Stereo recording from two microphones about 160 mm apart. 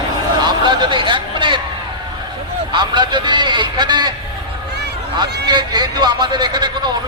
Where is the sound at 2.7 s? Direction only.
30° right (ahead or behind).